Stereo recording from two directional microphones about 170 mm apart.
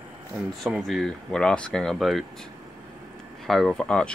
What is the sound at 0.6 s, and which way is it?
Speech, centre (ahead or behind).